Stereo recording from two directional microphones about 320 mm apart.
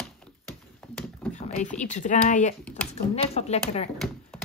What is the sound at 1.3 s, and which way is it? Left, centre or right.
Speech, left.